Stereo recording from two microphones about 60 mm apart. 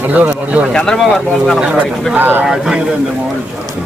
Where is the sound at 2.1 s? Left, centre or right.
Right.